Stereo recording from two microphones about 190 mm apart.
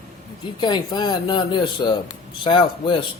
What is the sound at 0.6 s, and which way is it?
Speech, 20° left (ahead or behind).